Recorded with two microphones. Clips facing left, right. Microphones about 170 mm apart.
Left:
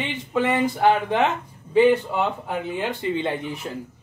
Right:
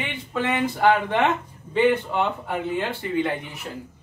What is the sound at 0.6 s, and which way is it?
Speech, 10° left (ahead or behind).